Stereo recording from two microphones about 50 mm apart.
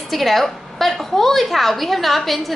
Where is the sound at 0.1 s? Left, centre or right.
Centre.